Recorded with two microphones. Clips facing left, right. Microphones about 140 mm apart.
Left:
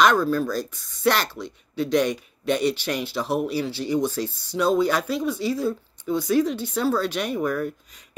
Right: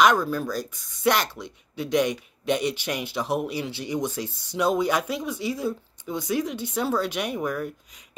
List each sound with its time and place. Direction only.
0.0 s speech: 15° right (ahead or behind)